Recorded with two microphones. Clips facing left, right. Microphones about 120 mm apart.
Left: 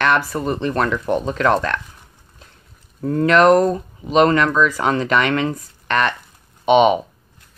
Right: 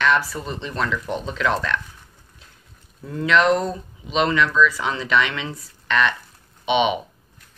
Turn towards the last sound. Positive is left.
turn(degrees=45)  # may be behind; listen again after turning